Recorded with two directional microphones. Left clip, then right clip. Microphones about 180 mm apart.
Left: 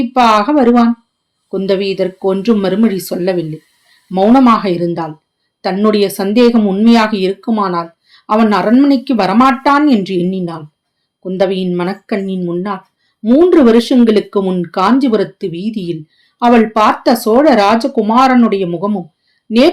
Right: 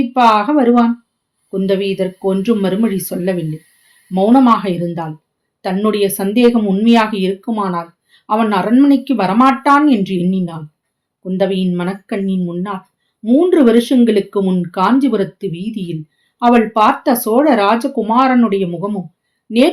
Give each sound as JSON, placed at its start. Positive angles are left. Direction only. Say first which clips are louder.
{"t": 0.1, "sound": "speech", "louder": "left 2 dB", "side_deg": 45}